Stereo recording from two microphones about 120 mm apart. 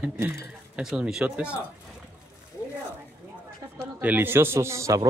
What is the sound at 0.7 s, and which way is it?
Speech, 10° right (ahead or behind).